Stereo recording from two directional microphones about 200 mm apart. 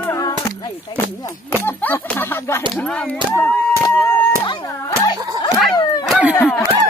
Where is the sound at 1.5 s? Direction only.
10° left (ahead or behind).